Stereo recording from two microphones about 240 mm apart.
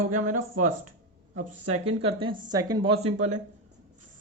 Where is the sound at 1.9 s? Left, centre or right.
Right.